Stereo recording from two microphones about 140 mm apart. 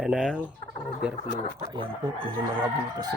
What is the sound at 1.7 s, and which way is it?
Speech, 35° right (ahead or behind).